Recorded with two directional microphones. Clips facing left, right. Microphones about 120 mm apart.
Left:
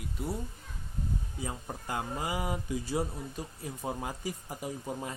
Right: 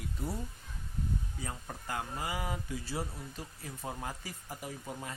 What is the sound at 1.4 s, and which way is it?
Speech, 20° left (ahead or behind).